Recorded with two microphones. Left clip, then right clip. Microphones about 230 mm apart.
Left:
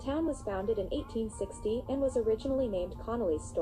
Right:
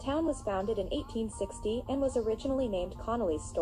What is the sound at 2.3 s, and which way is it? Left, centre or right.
Speech, right.